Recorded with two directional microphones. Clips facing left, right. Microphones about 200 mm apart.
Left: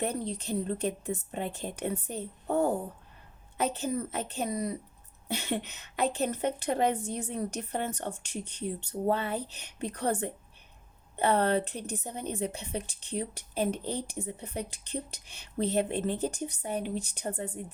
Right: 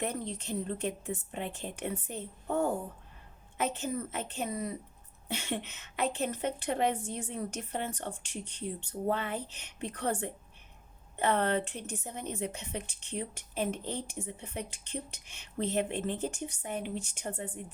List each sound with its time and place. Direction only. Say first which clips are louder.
0.0 s a woman's voice: left 3 dB; 35° left (ahead or behind)